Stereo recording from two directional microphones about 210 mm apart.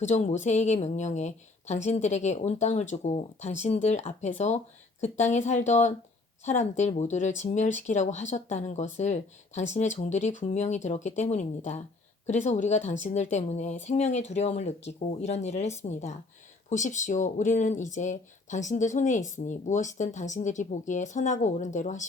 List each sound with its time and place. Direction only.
0.0 s speech: 35° left (ahead or behind)